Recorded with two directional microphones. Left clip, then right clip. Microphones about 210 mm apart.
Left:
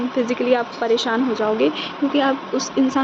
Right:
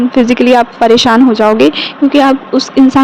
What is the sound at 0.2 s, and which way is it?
A woman's voice, 50° right (ahead or behind).